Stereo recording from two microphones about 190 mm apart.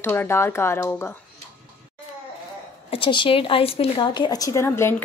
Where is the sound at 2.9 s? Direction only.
25° left (ahead or behind).